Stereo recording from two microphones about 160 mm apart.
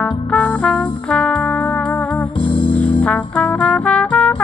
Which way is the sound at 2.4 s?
30° left (ahead or behind).